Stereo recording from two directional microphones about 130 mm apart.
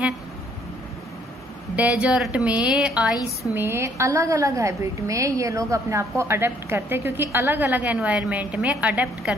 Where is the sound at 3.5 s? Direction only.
20° right (ahead or behind).